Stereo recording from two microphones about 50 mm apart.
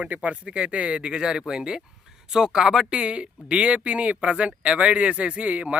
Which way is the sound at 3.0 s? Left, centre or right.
Right.